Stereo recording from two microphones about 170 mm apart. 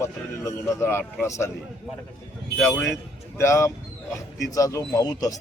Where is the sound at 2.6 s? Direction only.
Centre (ahead or behind).